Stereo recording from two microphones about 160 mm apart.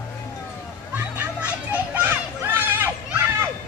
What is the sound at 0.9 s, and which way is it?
Children playing, 10° right (ahead or behind).